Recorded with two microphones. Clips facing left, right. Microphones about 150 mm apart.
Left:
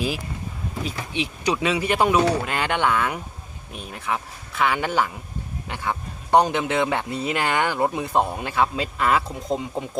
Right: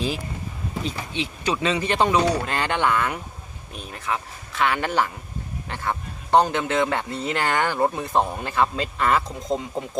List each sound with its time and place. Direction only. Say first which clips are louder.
0.9 s speech: left 2 dB; 15° left (ahead or behind)